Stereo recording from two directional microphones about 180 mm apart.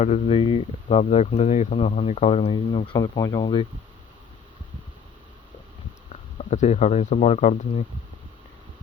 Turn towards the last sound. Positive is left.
turn(degrees=40)  # may be behind; listen again after turning